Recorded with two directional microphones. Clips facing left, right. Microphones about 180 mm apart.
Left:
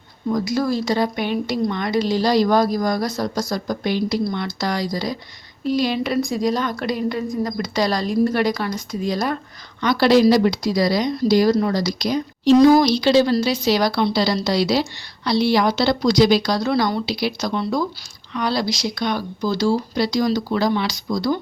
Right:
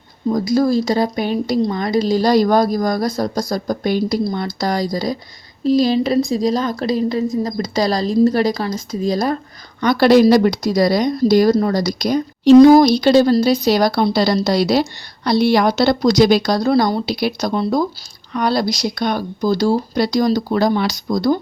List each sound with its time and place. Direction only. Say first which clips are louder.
0.3 s a woman's voice: right 5 dB; 40° right (ahead or behind)
9.8 s a woman's voice: right 3 dB; 50° right (ahead or behind)